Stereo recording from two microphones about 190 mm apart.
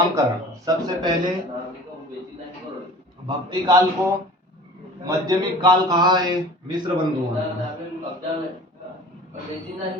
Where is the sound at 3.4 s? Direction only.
20° right (ahead or behind).